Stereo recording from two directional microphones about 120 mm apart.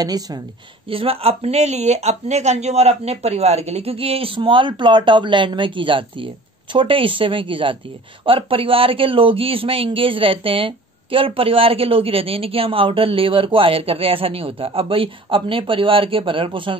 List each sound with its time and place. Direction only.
0.0 s speech: 30° right (ahead or behind)
0.8 s a man's voice: 50° right (ahead or behind)